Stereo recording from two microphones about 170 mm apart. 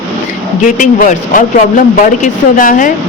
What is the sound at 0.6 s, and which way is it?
Speech, 50° left (ahead or behind).